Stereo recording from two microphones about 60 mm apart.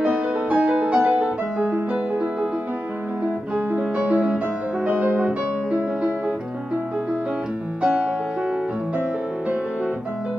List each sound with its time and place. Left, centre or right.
0.0 s music: centre
3.5 s music: right
7.8 s music: right